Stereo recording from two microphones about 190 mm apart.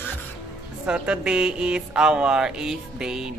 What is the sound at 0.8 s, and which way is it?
Speech, 5° right (ahead or behind).